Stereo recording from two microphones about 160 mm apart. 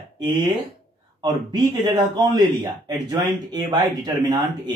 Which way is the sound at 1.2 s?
25° right (ahead or behind).